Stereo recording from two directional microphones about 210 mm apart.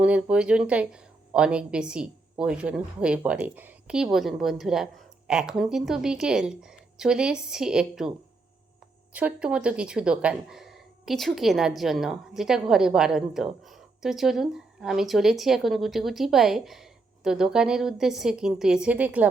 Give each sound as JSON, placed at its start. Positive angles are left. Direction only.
{"t": 0.0, "sound": "speech", "side_deg": -5}
{"t": 9.1, "sound": "speech", "side_deg": -5}